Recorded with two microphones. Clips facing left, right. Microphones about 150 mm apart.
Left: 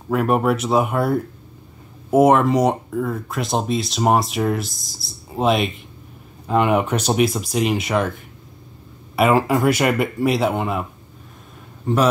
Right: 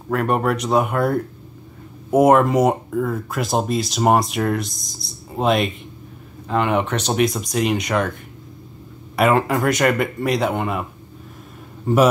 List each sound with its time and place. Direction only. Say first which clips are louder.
0.1 s speech: left 2 dB; 5° left (ahead or behind)